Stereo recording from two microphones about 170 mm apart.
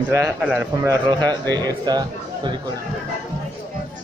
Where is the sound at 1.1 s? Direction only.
25° right (ahead or behind).